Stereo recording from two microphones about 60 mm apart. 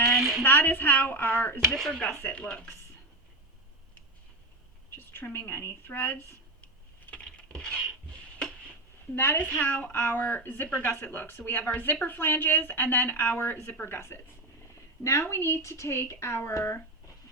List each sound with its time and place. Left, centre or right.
0.0 s a sound: centre
0.4 s a woman's voice: left
1.9 s speech: centre
4.9 s a woman's voice: left
7.2 s patter: centre
9.1 s a woman's voice: left